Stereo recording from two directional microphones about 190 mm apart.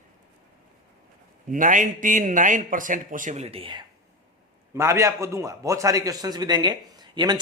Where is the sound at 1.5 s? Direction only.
45° right (ahead or behind).